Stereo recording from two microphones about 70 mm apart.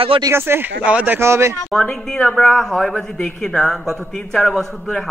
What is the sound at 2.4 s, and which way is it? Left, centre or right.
A man's voice, centre.